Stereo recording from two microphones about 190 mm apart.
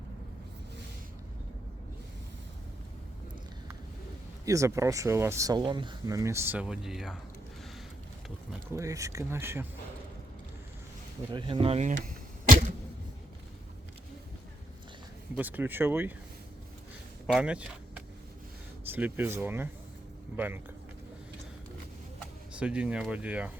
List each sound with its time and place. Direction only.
4.4 s speech: 15° right (ahead or behind)
8.7 s speech: 15° right (ahead or behind)
11.3 s speech: 25° right (ahead or behind)
12.0 s a sound: 40° right (ahead or behind)
15.4 s speech: 10° right (ahead or behind)
17.3 s speech: 5° right (ahead or behind)
22.5 s speech: 5° right (ahead or behind)